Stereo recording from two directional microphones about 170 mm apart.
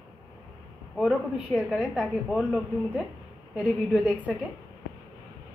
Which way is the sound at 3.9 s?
10° right (ahead or behind).